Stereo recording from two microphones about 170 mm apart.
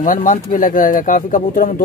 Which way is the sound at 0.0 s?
50° left (ahead or behind).